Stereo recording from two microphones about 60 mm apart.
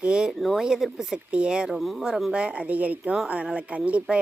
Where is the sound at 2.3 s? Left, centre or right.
Centre.